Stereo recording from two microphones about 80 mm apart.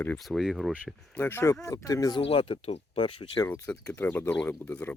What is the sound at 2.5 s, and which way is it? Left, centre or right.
Speech, left.